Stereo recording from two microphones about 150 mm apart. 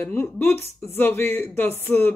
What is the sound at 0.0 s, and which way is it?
Speech, 15° left (ahead or behind).